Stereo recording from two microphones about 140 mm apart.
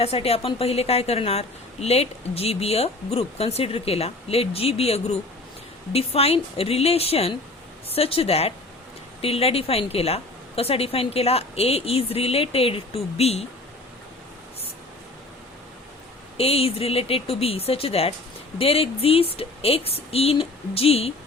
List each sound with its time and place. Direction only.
0.0 s a woman's voice: 45° left (ahead or behind)
16.4 s a woman's voice: 45° left (ahead or behind)